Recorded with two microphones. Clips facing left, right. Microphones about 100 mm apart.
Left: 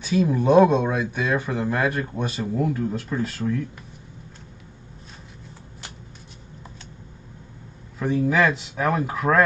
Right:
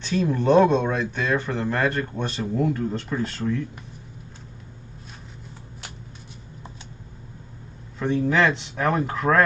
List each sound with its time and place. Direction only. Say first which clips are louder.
0.0 s speech: left 2 dB; 10° left (ahead or behind)
8.0 s speech: even; 5° left (ahead or behind)